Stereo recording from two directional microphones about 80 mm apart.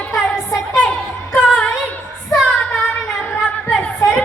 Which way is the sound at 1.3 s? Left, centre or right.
Centre.